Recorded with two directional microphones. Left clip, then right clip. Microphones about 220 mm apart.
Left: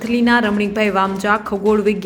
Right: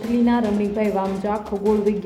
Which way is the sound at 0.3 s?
10° left (ahead or behind).